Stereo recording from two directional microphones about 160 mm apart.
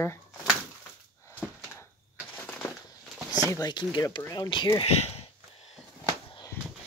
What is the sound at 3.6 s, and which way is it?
Speech, 25° left (ahead or behind).